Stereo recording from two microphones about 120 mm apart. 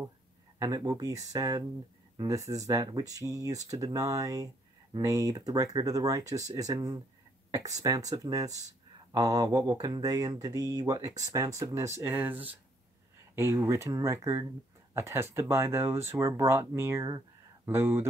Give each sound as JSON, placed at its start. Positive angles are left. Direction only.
{"t": 0.6, "sound": "speech", "side_deg": -30}